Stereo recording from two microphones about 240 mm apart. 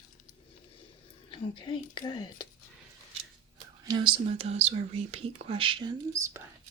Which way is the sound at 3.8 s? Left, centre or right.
Centre.